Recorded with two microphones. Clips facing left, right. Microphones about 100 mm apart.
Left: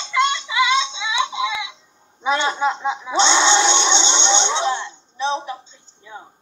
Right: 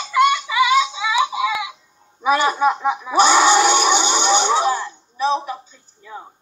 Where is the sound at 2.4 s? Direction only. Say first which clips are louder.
Right 3 dB; 25° left (ahead or behind).